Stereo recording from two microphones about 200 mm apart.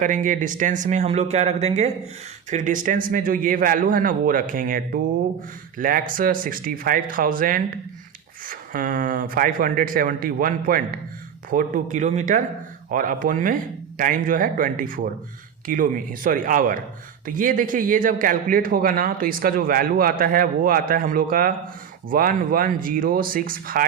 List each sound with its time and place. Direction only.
0.0 s a man's voice: 40° right (ahead or behind)